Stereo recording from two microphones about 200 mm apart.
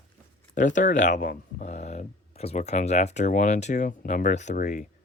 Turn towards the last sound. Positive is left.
turn(degrees=40)  # may be behind; listen again after turning